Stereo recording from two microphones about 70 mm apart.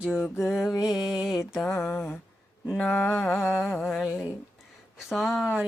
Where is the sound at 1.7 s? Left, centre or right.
Left.